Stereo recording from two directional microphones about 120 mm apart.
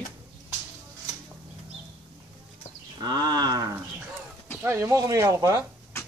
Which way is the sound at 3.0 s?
35° right (ahead or behind).